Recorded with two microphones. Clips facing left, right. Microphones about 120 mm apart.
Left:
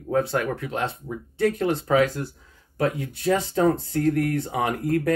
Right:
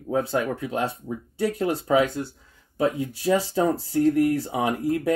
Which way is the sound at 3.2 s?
5° right (ahead or behind).